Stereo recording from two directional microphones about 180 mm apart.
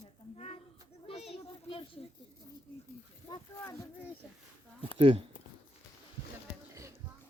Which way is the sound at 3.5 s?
15° left (ahead or behind).